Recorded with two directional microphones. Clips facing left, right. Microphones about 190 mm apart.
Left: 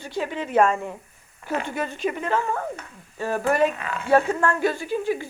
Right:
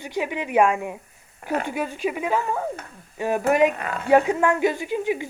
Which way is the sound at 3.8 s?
45° right (ahead or behind).